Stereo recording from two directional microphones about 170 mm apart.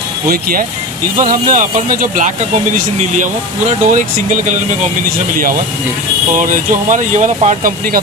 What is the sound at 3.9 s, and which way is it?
Speech, 45° right (ahead or behind).